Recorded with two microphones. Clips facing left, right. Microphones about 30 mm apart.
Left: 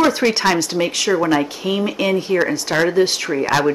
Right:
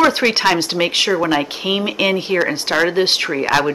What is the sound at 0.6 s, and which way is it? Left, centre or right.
Speech, right.